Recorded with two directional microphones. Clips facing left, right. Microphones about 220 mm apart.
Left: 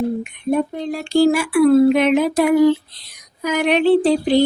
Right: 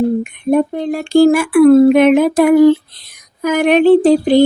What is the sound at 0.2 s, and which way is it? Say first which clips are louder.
Speech: right 6 dB; 55° right (ahead or behind).